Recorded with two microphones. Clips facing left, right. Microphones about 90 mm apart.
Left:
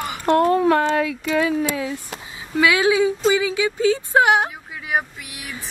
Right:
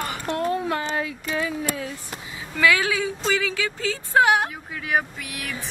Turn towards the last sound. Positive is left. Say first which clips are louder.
# right 3 dB
turn(degrees=5)  # may be behind; listen again after turning